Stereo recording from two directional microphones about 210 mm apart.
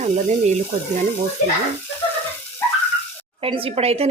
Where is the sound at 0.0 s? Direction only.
35° right (ahead or behind).